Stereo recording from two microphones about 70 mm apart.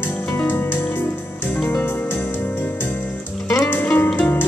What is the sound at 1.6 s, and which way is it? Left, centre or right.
Music, left.